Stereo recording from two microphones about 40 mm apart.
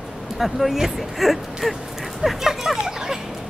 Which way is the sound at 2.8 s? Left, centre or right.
Centre.